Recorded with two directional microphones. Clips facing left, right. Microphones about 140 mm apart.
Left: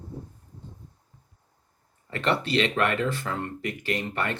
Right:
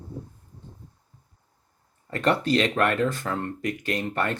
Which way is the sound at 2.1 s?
45° right (ahead or behind).